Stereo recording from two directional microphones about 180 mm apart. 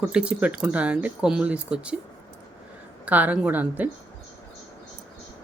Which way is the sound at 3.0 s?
10° right (ahead or behind).